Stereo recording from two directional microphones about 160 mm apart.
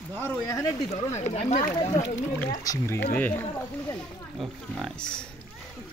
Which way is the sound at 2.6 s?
20° left (ahead or behind).